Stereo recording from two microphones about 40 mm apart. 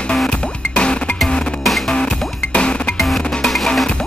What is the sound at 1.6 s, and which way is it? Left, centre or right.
Music, centre.